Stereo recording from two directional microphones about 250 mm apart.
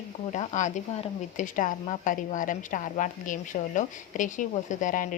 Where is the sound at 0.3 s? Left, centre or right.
Left.